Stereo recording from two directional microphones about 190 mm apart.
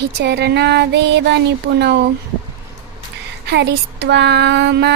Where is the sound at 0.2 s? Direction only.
60° right (ahead or behind).